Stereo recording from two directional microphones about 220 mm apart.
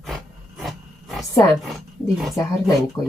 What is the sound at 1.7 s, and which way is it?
Speech, centre (ahead or behind).